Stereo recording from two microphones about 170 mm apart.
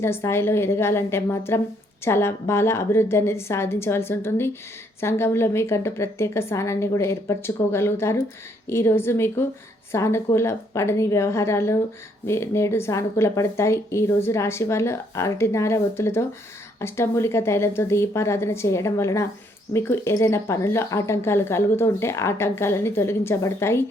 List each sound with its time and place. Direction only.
0.0 s speech: 15° left (ahead or behind)